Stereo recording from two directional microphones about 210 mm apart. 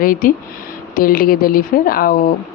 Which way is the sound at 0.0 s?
40° left (ahead or behind).